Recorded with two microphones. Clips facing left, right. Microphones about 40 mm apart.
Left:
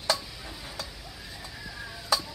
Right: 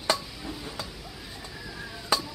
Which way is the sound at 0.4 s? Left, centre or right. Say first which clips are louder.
Right 3 dB; centre.